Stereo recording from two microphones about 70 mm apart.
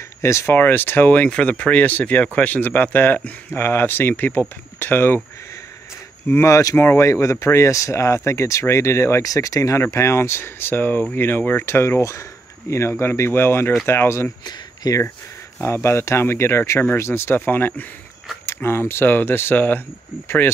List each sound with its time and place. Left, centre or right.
0.2 s speech: left
0.6 s speech: left
6.4 s speech: left
9.2 s speech: left
14.4 s speech: left
15.6 s speech: left